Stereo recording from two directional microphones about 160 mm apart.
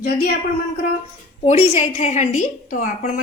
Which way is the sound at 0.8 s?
60° left (ahead or behind).